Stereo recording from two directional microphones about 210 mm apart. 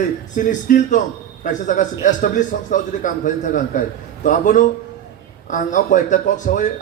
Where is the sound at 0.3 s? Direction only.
35° left (ahead or behind).